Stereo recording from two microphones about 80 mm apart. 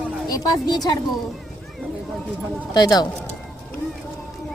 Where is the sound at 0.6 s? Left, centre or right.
Left.